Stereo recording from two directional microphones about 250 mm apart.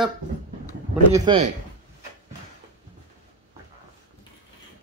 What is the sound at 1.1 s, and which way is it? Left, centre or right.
Speech, right.